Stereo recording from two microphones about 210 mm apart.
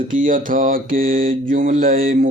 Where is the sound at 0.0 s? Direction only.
40° right (ahead or behind).